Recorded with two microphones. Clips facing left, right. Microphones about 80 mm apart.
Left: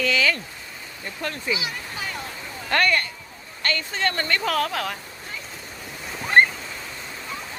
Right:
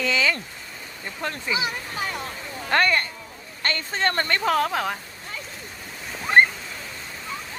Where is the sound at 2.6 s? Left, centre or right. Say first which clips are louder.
Right 1 dB; right.